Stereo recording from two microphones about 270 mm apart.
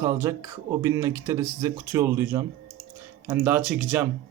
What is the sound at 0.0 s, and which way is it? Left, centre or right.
Speech, centre.